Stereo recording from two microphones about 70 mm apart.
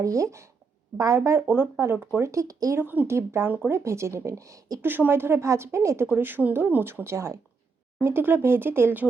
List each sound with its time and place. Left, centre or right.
0.0 s speech: right
1.5 s a woman's voice: right
2.7 s speech: right
3.1 s a woman's voice: right
4.8 s a woman's voice: right
6.1 s a woman's voice: right